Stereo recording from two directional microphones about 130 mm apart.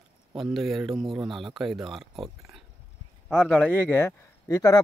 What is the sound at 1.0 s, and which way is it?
Speech, 40° right (ahead or behind).